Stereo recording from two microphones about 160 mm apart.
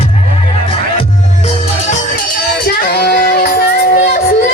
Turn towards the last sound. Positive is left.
turn(degrees=70)  # may be behind; listen again after turning